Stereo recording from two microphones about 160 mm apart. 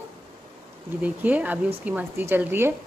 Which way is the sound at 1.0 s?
10° right (ahead or behind).